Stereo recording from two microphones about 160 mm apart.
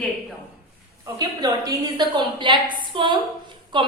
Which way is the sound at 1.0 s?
20° right (ahead or behind).